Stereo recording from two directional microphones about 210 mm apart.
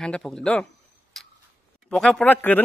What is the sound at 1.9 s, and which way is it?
Speech, 5° left (ahead or behind).